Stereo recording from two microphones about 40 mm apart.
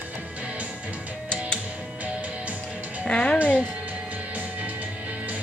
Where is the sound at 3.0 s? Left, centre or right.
Left.